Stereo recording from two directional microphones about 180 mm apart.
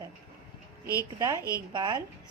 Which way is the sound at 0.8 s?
15° left (ahead or behind).